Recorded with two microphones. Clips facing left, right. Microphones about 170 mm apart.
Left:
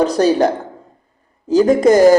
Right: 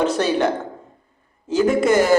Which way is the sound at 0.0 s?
40° left (ahead or behind).